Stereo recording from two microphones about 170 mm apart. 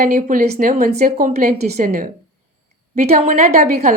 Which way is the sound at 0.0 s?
55° right (ahead or behind).